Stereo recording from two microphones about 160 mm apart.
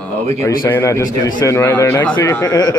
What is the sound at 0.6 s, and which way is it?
A man's voice, 15° left (ahead or behind).